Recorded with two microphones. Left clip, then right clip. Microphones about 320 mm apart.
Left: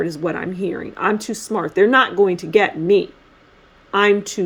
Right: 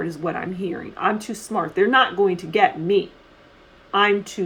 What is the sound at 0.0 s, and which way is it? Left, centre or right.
Speech, left.